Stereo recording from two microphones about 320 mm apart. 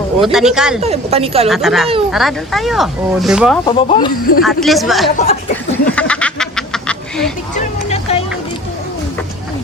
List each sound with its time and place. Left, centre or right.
0.2 s speech: centre
0.8 s speech: centre
1.5 s speech: centre
3.7 s speech: centre
4.4 s speech: centre
5.1 s speech: centre
5.9 s a sound: centre
7.5 s vehicle: centre